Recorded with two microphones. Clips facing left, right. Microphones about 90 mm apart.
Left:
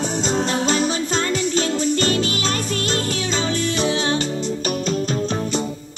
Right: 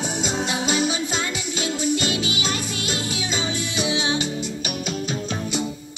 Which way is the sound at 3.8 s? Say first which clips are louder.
Left 1 dB; 50° left (ahead or behind).